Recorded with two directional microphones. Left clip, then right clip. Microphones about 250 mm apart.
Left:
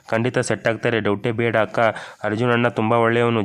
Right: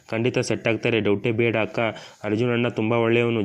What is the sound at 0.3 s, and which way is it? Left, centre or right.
Speech, centre.